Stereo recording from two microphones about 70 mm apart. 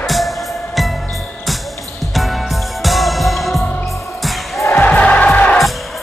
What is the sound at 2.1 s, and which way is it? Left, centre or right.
Music, centre.